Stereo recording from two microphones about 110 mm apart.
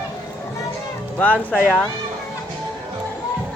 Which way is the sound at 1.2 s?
15° left (ahead or behind).